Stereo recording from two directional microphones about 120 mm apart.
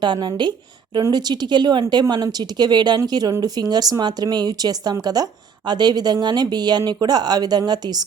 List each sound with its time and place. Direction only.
0.0 s speech: 40° right (ahead or behind)